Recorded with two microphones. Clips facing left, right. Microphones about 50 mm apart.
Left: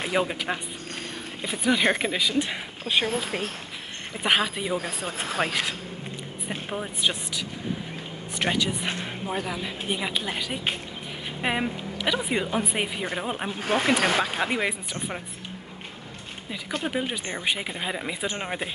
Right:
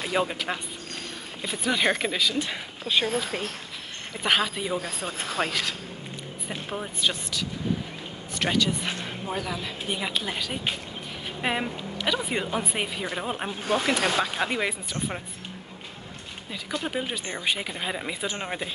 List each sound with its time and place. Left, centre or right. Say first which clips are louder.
0.1 s speech: even; centre
1.7 s speech: left 2 dB; centre; by 3.4 s left
4.2 s speech: left 1 dB; centre
4.8 s speech: left 1 dB; left; by 13.5 s centre
13.8 s speech: left 3 dB; left
14.2 s speech: left 1 dB; centre
16.8 s speech: left 3 dB; centre